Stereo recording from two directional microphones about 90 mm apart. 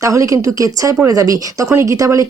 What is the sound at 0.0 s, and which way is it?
Speech, 35° right (ahead or behind).